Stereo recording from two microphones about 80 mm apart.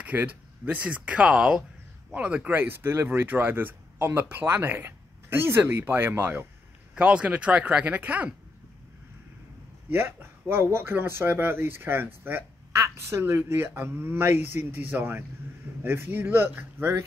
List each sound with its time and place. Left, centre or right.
0.0 s speech: centre
7.0 s speech: centre
9.8 s a woman's voice: right